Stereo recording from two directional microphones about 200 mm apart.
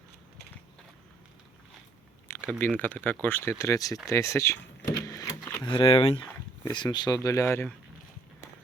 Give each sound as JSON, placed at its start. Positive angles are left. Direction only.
{"t": 2.2, "sound": "speech", "side_deg": 10}
{"t": 4.0, "sound": "power windows", "side_deg": 15}
{"t": 5.6, "sound": "speech", "side_deg": 25}